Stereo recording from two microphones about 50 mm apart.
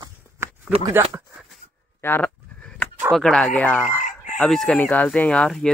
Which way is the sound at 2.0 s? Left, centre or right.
Left.